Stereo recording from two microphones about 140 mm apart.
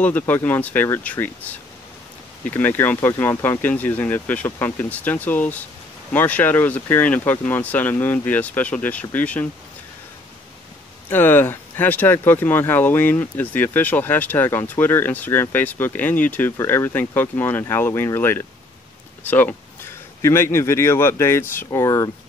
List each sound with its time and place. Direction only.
0.0 s speech: 10° left (ahead or behind)
11.1 s speech: 15° left (ahead or behind)